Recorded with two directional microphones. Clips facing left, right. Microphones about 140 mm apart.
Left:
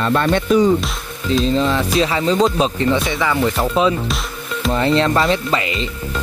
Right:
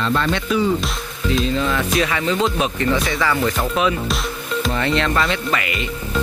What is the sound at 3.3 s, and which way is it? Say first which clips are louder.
Speech: left 3 dB; 15° left (ahead or behind).